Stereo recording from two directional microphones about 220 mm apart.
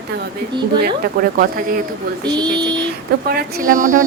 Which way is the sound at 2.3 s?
20° right (ahead or behind).